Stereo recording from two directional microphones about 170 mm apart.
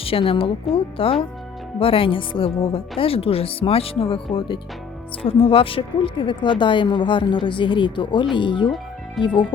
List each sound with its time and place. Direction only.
0.0 s speech: 35° left (ahead or behind)